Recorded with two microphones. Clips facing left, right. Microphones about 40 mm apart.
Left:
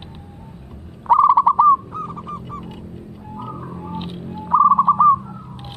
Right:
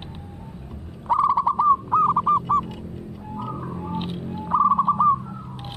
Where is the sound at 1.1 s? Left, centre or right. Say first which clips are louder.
Left 7 dB; left.